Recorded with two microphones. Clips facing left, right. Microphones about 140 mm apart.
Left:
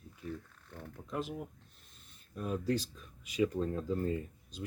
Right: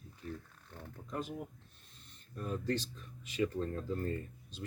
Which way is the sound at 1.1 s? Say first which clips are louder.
Left 2 dB; 5° left (ahead or behind).